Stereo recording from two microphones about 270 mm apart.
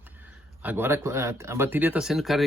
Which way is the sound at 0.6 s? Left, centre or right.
Centre.